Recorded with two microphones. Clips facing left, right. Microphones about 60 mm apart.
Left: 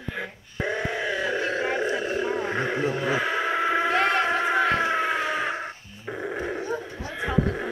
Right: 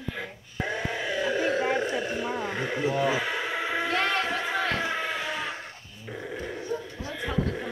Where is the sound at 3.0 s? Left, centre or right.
Centre.